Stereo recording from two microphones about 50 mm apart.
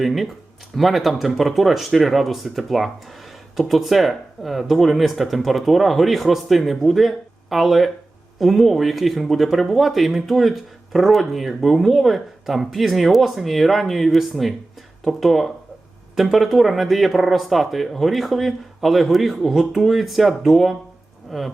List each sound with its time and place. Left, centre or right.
0.0 s speech: centre
21.2 s rain on surface: centre